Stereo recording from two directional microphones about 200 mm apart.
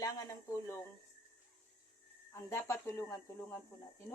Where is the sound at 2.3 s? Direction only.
15° left (ahead or behind).